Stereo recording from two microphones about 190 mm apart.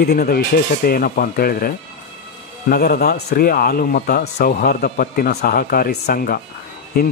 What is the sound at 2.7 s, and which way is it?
A man's voice, 50° left (ahead or behind).